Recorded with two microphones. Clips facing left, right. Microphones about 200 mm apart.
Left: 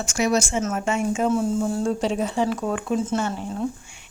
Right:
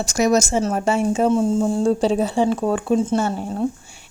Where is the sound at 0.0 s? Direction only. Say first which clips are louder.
Right 4 dB; 40° right (ahead or behind).